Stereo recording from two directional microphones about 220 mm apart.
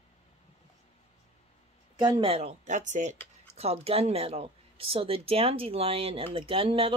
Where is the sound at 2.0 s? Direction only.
20° right (ahead or behind).